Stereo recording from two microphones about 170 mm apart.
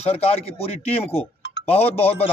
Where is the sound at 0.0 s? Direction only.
35° left (ahead or behind).